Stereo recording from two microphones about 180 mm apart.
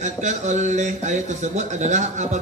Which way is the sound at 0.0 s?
40° right (ahead or behind).